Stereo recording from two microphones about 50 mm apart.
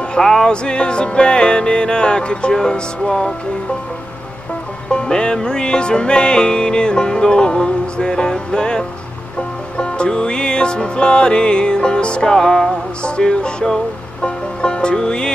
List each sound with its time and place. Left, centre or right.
0.1 s music: centre
4.8 s music: centre